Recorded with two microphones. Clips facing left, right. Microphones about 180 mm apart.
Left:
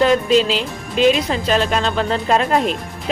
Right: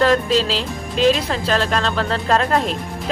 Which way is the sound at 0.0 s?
Centre (ahead or behind).